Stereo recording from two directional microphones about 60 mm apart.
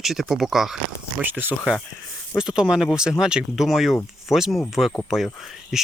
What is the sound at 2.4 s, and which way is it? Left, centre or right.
Speech, centre.